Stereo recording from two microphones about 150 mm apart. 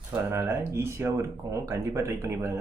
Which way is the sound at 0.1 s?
15° right (ahead or behind).